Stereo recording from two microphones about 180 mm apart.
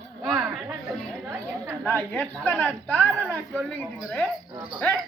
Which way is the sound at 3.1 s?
10° right (ahead or behind).